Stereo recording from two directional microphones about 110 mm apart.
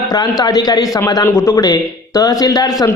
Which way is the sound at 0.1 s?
40° left (ahead or behind).